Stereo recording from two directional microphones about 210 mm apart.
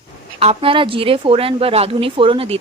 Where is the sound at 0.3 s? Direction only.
25° right (ahead or behind).